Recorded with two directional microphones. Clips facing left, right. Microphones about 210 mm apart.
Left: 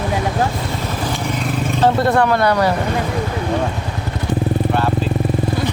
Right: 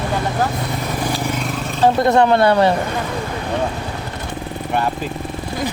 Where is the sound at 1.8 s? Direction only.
15° right (ahead or behind).